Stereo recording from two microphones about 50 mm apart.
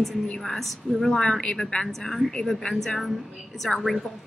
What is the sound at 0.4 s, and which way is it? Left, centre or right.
A woman's voice, centre.